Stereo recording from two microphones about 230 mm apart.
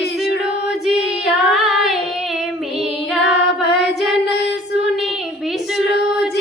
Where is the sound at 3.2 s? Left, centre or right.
Left.